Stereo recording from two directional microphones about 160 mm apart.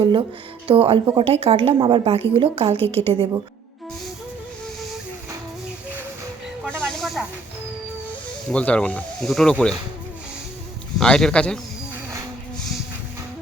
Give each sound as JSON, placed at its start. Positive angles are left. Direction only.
{"t": 0.0, "sound": "a woman's voice", "side_deg": -30}
{"t": 6.7, "sound": "snake", "side_deg": 0}
{"t": 8.4, "sound": "speech", "side_deg": 5}
{"t": 10.9, "sound": "speech", "side_deg": 5}